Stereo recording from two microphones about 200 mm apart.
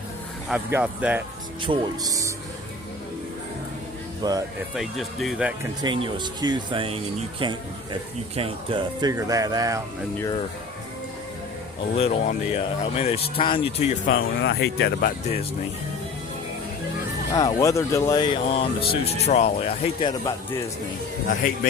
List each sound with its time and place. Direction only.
0.4 s speech: 5° right (ahead or behind)
1.6 s speech: 20° right (ahead or behind)
4.2 s speech: 20° right (ahead or behind)
4.7 s speech: centre (ahead or behind)
5.8 s speech: 25° right (ahead or behind)
11.9 s speech: 30° left (ahead or behind)
14.0 s speech: 50° left (ahead or behind)
17.3 s speech: 15° left (ahead or behind)